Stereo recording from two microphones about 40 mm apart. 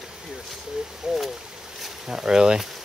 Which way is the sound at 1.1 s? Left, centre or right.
Centre.